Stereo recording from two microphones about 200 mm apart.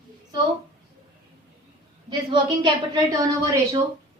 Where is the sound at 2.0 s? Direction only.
25° right (ahead or behind).